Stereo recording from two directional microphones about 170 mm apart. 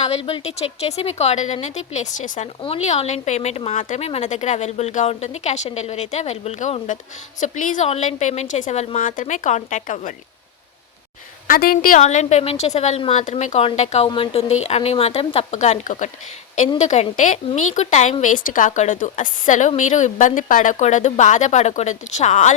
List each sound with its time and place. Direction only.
0.3 s a woman's voice: 35° left (ahead or behind)
11.4 s a woman's voice: 55° left (ahead or behind)